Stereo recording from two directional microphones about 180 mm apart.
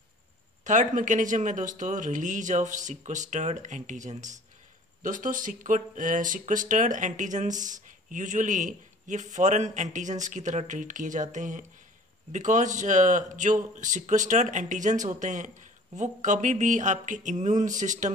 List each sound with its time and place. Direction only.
0.7 s speech: 45° right (ahead or behind)